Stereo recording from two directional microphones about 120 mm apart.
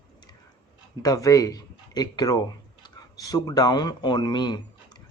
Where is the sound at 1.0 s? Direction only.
30° left (ahead or behind).